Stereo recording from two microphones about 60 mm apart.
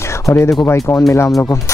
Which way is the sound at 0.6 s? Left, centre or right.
Left.